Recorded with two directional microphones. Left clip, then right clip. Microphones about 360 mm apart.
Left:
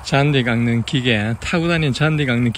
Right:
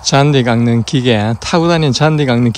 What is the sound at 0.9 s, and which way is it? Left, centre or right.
Speech, centre.